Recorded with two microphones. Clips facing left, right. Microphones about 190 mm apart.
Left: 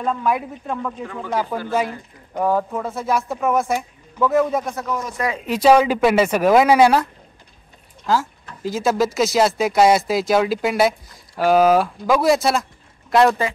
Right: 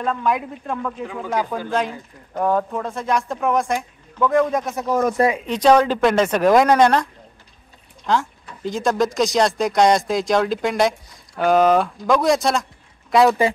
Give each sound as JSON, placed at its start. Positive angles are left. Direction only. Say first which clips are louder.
{"t": 0.0, "sound": "speech", "louder": "even", "side_deg": 5}
{"t": 1.0, "sound": "speech", "louder": "right 1 dB", "side_deg": -10}
{"t": 2.3, "sound": "speech", "louder": "even", "side_deg": 5}
{"t": 4.9, "sound": "speech", "louder": "right 8 dB", "side_deg": -50}
{"t": 5.5, "sound": "speech", "louder": "left 3 dB", "side_deg": 5}
{"t": 8.1, "sound": "speech", "louder": "even", "side_deg": 5}